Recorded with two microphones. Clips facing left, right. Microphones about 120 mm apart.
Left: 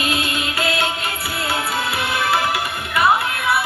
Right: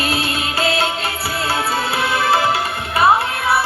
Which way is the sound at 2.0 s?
30° right (ahead or behind).